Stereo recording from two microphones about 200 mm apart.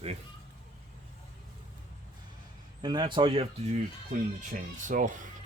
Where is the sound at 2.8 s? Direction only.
20° right (ahead or behind).